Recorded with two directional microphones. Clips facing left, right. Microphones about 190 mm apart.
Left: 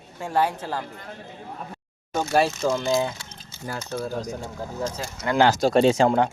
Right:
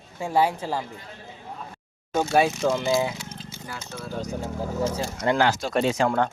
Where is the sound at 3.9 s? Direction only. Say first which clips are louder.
Left 10 dB; 40° left (ahead or behind).